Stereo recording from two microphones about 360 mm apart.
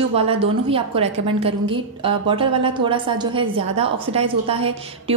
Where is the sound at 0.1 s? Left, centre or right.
Centre.